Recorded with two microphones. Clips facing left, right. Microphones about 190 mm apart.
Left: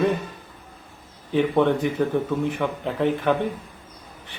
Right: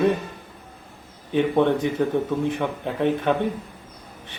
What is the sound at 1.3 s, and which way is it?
Speech, 20° right (ahead or behind).